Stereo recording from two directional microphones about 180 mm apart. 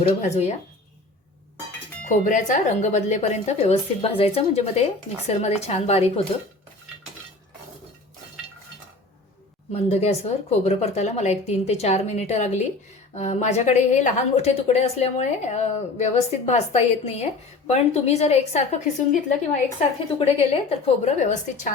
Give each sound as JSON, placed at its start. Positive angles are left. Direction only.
{"t": 0.2, "sound": "a woman's voice", "side_deg": 35}
{"t": 2.0, "sound": "a woman's voice", "side_deg": 45}
{"t": 9.7, "sound": "a woman's voice", "side_deg": 35}